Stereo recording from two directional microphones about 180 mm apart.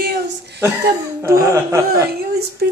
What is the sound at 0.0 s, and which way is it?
Chuckle, 65° right (ahead or behind).